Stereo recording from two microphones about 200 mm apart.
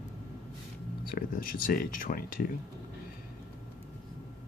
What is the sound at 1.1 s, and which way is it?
Speech, 45° left (ahead or behind).